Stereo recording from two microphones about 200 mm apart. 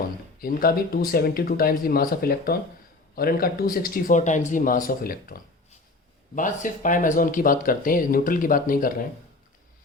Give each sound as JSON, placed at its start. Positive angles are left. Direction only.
{"t": 0.3, "sound": "speech", "side_deg": 45}